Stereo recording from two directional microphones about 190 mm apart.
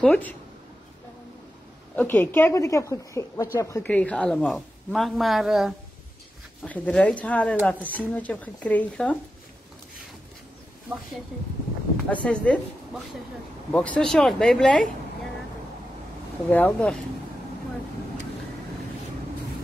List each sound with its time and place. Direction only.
0.0 s speech: 5° left (ahead or behind)
2.0 s a woman's voice: 10° left (ahead or behind)
12.1 s speech: 5° left (ahead or behind)
13.7 s a woman's voice: 5° left (ahead or behind)
16.4 s speech: 10° left (ahead or behind)